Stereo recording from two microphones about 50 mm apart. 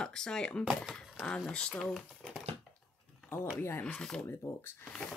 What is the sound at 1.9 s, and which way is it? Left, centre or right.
Speech, centre.